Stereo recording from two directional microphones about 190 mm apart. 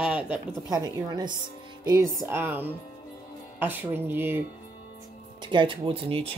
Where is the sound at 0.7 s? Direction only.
20° right (ahead or behind).